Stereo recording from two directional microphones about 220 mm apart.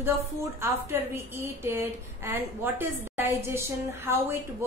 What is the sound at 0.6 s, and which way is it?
A woman's voice, 10° right (ahead or behind).